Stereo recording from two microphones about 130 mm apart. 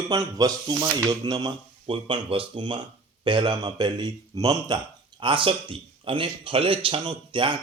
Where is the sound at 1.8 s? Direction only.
45° right (ahead or behind); by 4.8 s 30° right (ahead or behind).